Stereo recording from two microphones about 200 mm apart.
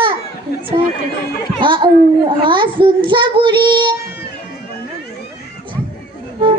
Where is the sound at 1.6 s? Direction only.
25° right (ahead or behind).